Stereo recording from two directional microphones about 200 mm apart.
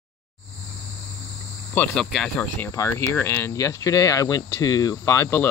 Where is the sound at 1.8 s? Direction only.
Centre (ahead or behind).